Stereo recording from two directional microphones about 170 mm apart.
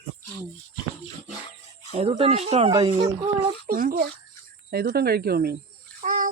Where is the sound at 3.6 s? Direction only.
60° right (ahead or behind).